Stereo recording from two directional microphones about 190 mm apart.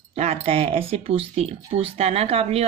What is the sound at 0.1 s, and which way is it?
Speech, 35° right (ahead or behind).